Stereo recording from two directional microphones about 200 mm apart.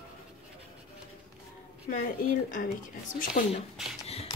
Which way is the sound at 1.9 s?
45° left (ahead or behind).